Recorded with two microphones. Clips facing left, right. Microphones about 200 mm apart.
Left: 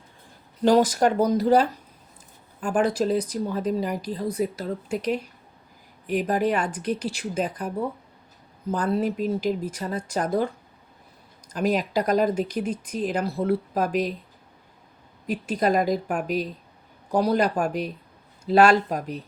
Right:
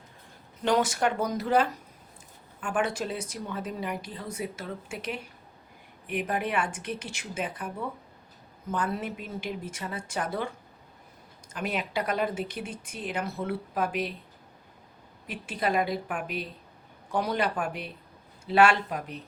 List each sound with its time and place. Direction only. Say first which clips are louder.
0.6 s speech: left 7 dB; 35° left (ahead or behind)
11.5 s speech: left 8 dB; 40° left (ahead or behind)
15.3 s speech: left 7 dB; 40° left (ahead or behind)